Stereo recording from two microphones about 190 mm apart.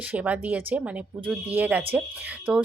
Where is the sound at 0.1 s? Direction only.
10° right (ahead or behind).